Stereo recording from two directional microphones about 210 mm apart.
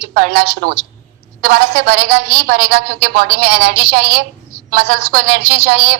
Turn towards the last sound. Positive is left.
turn(degrees=-50)  # may be behind; listen again after turning